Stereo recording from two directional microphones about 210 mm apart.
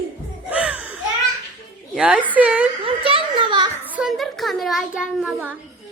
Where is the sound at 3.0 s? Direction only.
25° right (ahead or behind).